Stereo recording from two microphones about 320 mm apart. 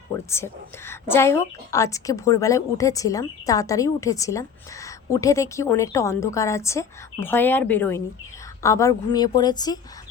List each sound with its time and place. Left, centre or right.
0.3 s a woman's voice: centre